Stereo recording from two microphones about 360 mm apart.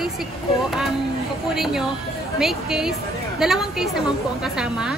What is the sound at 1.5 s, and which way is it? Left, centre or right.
A woman's voice, centre.